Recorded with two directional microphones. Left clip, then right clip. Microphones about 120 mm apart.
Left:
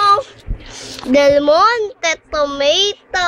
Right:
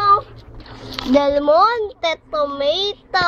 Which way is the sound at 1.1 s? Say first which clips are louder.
Left 4 dB; 50° left (ahead or behind).